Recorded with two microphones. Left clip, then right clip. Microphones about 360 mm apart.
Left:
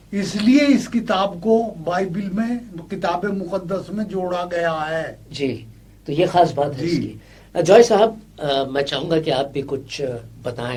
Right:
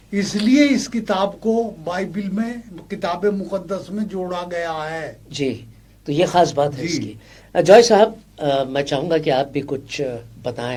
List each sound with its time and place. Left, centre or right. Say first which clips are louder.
0.1 s a man's voice: left 1 dB; right